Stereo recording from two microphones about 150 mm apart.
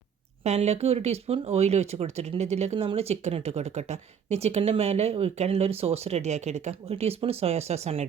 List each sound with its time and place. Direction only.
0.4 s speech: 45° right (ahead or behind)